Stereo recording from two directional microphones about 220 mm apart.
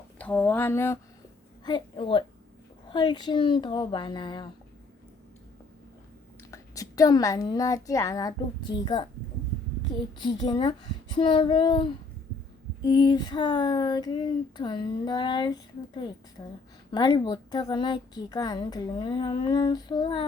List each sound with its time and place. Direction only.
0.2 s speech: 5° left (ahead or behind)
1.6 s speech: 20° left (ahead or behind)
6.5 s a woman's voice: 15° left (ahead or behind)
10.2 s speech: 20° left (ahead or behind)